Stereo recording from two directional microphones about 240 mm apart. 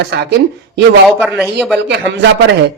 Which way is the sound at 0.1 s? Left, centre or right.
Right.